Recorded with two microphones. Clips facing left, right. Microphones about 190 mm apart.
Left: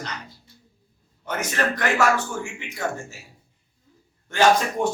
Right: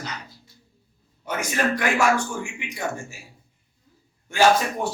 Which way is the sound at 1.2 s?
10° right (ahead or behind).